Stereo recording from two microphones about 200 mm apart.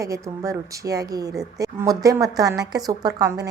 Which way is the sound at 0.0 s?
15° right (ahead or behind).